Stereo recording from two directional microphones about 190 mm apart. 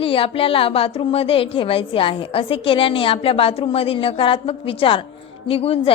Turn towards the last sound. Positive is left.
turn(degrees=30)  # may be behind; listen again after turning